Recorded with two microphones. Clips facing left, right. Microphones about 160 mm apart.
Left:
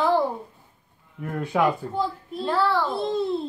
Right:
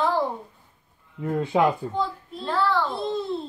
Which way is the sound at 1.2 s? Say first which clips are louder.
Right 2 dB; 20° right (ahead or behind).